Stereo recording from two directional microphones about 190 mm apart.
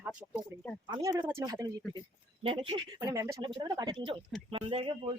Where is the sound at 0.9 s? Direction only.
20° right (ahead or behind).